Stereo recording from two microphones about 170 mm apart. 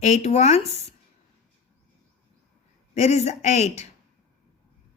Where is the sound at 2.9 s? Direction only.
40° left (ahead or behind).